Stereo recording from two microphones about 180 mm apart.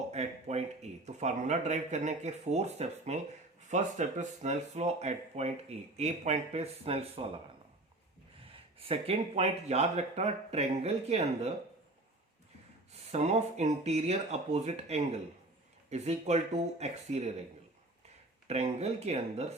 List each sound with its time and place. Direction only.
0.1 s speech: 35° right (ahead or behind)
8.4 s speech: 30° right (ahead or behind)
12.9 s speech: 35° right (ahead or behind)
18.4 s speech: 35° right (ahead or behind)